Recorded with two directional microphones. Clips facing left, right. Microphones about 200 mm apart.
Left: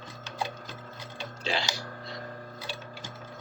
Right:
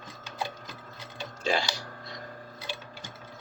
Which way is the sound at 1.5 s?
45° right (ahead or behind).